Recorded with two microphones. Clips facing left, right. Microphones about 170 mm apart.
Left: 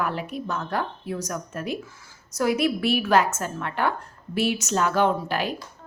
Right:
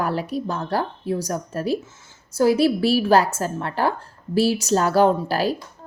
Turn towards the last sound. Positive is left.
turn(degrees=-35)  # may be behind; listen again after turning